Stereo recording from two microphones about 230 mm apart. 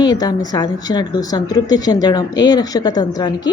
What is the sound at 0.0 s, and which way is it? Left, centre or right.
A woman's voice, centre.